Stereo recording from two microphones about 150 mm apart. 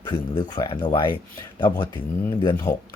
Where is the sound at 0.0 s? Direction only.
30° left (ahead or behind).